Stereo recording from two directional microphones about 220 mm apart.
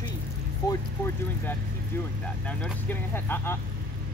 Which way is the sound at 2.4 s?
5° left (ahead or behind).